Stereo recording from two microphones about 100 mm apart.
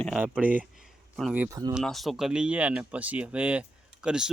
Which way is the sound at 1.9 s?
Centre (ahead or behind).